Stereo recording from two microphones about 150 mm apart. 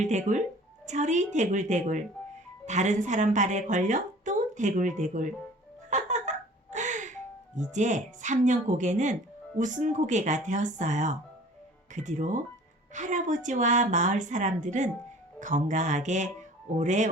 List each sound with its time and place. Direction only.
0.0 s a woman's voice: 50° right (ahead or behind)
5.9 s a sound: 50° right (ahead or behind)
7.5 s a woman's voice: 55° right (ahead or behind)